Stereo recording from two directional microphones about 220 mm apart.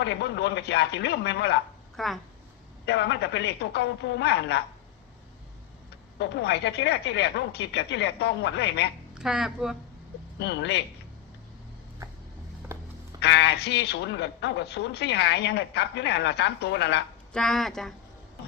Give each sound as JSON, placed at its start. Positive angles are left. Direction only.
{"t": 0.0, "sound": "speech", "side_deg": 50}
{"t": 2.0, "sound": "speech", "side_deg": 0}
{"t": 2.8, "sound": "speech", "side_deg": 50}
{"t": 6.1, "sound": "speech", "side_deg": 50}
{"t": 9.1, "sound": "speech", "side_deg": 0}
{"t": 10.3, "sound": "speech", "side_deg": 50}
{"t": 13.1, "sound": "speech", "side_deg": 50}
{"t": 17.3, "sound": "speech", "side_deg": 0}